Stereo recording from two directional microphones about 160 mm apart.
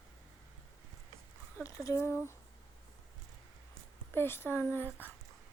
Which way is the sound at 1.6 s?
20° left (ahead or behind).